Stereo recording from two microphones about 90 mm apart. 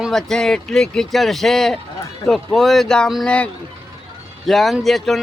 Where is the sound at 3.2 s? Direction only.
15° left (ahead or behind).